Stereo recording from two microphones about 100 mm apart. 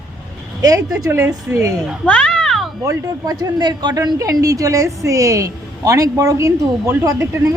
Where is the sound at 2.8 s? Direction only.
35° right (ahead or behind).